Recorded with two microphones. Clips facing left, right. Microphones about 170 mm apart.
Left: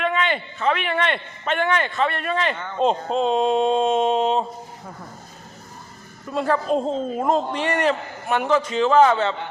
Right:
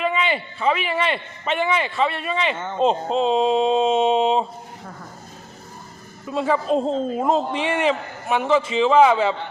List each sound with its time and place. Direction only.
0.0 s a woman's voice: 5° right (ahead or behind)
6.2 s a woman's voice: centre (ahead or behind)